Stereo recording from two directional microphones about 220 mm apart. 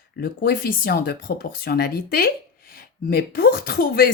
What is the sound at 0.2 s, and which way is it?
Speech, 40° left (ahead or behind).